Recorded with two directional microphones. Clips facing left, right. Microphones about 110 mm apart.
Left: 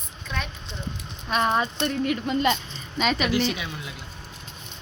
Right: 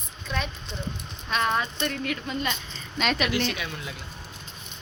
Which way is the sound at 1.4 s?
25° left (ahead or behind).